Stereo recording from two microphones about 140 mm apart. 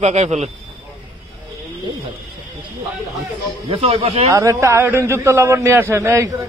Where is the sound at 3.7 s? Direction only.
40° right (ahead or behind).